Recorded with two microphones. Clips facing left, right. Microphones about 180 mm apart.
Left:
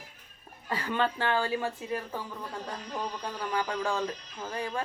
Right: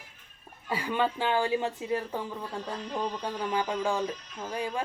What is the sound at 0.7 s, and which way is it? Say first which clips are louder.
Speech: right 1 dB; 10° right (ahead or behind).